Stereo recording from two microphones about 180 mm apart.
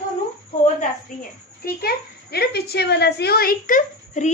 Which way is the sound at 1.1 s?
45° left (ahead or behind).